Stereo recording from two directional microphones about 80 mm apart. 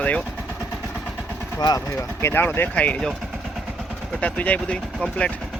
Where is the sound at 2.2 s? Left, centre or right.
Left.